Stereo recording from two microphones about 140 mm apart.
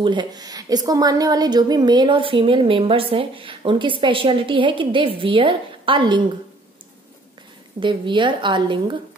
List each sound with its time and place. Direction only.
0.0 s a woman's voice: 30° right (ahead or behind)
7.8 s a woman's voice: 35° right (ahead or behind)